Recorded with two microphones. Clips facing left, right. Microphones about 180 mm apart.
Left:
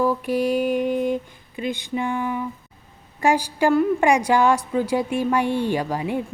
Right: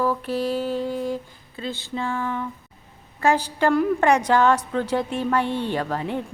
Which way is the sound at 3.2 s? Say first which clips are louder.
Left 1 dB; 10° left (ahead or behind).